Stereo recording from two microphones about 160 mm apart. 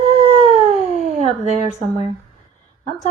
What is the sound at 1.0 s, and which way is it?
Speech, 45° right (ahead or behind).